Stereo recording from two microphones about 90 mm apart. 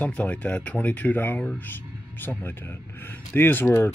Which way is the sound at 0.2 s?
15° left (ahead or behind).